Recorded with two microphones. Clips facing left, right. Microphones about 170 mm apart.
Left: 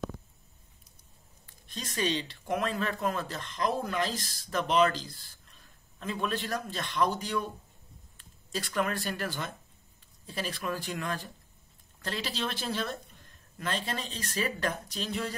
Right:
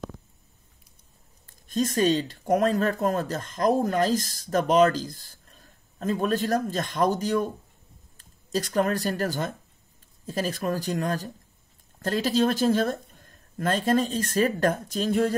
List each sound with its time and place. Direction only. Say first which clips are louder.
1.7 s speech: right 9 dB; 45° right (ahead or behind)